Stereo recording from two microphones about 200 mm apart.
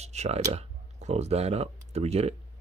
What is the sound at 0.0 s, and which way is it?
Speech, 35° right (ahead or behind).